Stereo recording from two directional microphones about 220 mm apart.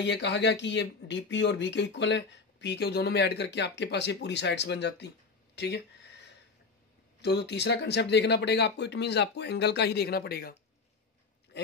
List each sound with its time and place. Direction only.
0.0 s speech: 50° left (ahead or behind)
5.6 s a sound: 50° left (ahead or behind)
7.2 s speech: 50° left (ahead or behind)